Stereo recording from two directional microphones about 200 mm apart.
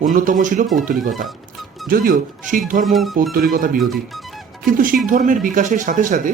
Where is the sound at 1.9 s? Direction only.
45° right (ahead or behind).